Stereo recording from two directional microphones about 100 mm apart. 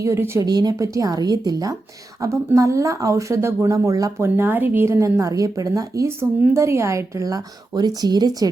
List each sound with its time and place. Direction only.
0.0 s speech: 30° right (ahead or behind)
0.4 s a woman's voice: 40° right (ahead or behind)
4.4 s a woman's voice: 20° right (ahead or behind); by 8.4 s 40° right (ahead or behind)